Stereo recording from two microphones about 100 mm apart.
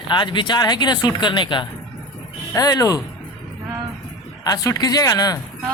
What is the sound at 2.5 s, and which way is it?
Speech, 35° left (ahead or behind).